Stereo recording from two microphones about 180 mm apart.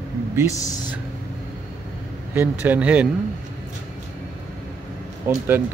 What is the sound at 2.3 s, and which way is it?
Speech, 10° right (ahead or behind).